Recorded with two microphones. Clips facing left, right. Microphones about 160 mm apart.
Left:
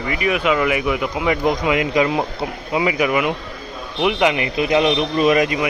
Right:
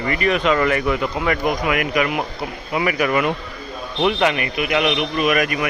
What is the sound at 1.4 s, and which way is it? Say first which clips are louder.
Speech: left 2 dB; 25° left (ahead or behind).